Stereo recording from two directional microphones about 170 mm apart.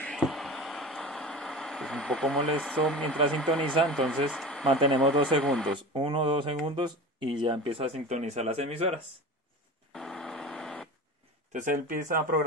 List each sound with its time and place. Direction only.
0.0 s vehicle: centre (ahead or behind)
3.3 s speech: 5° left (ahead or behind)
5.9 s speech: 30° right (ahead or behind)
9.9 s a sound: 5° left (ahead or behind)
11.5 s speech: 50° right (ahead or behind)